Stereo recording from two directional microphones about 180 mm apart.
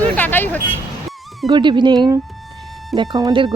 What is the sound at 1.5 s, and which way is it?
Speech, 25° right (ahead or behind).